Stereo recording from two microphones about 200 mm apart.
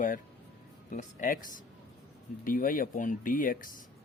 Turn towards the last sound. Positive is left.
turn(degrees=45)  # may be behind; listen again after turning